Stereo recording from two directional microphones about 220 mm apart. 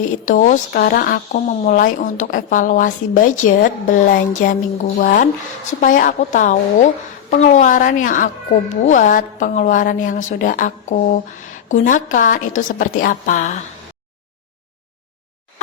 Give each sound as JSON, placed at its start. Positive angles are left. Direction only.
{"t": 0.3, "sound": "speech", "side_deg": 35}